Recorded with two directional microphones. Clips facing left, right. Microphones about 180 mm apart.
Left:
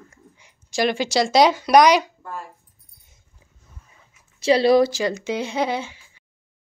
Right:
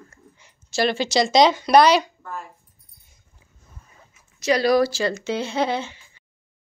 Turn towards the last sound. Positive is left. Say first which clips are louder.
# even
turn(degrees=10)  # may be behind; listen again after turning